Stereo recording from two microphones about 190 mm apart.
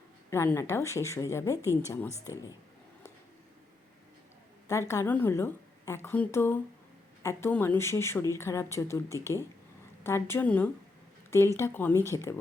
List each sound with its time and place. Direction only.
0.3 s a woman's voice: 15° left (ahead or behind)
4.7 s a woman's voice: 15° left (ahead or behind)